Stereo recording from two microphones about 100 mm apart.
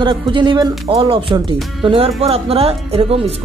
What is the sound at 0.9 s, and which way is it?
Speech, 65° right (ahead or behind).